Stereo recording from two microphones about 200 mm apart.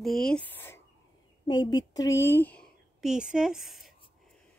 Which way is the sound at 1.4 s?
20° left (ahead or behind).